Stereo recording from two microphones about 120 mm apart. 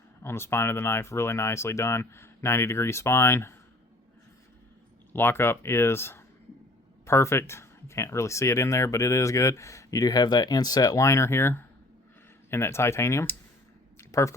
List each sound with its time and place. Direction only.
0.2 s speech: 20° left (ahead or behind)
5.1 s speech: 20° left (ahead or behind)
14.0 s a sound: 25° left (ahead or behind)